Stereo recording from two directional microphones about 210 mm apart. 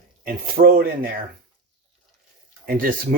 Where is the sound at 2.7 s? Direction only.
40° right (ahead or behind).